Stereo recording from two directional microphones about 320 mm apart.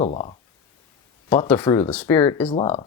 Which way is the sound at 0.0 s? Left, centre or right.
Centre.